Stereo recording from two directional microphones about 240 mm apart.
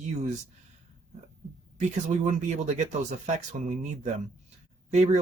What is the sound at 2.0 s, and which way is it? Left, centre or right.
Speech, right.